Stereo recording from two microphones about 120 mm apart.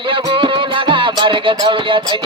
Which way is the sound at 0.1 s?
45° right (ahead or behind).